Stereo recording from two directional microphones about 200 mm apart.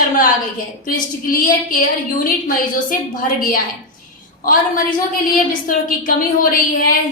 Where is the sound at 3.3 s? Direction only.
45° left (ahead or behind).